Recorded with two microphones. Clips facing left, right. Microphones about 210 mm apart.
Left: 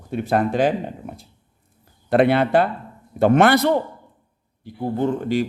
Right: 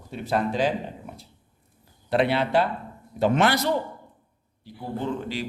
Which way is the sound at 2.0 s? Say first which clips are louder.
Left 6 dB; 50° left (ahead or behind).